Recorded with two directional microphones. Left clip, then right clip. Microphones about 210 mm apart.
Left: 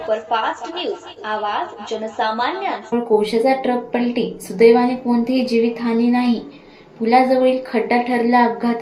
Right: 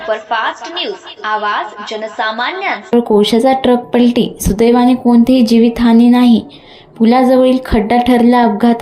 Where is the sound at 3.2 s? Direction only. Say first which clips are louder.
Right 6 dB; 40° right (ahead or behind).